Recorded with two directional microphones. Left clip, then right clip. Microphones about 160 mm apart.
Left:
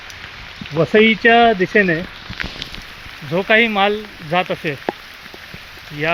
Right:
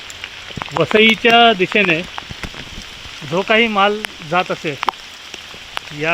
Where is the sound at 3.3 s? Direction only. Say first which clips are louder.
Even; 30° right (ahead or behind).